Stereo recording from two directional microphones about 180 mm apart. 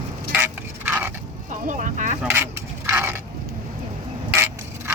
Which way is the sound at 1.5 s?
45° right (ahead or behind).